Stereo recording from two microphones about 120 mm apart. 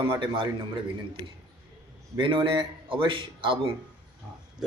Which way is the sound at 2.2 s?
45° right (ahead or behind).